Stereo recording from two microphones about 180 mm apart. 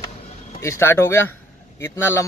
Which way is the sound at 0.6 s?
15° left (ahead or behind).